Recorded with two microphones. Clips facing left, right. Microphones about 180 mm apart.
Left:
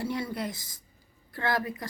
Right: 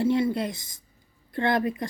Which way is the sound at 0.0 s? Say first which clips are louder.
Right 8 dB; 25° right (ahead or behind).